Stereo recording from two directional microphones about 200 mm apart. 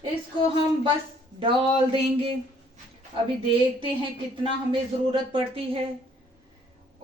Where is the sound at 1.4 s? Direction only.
25° right (ahead or behind).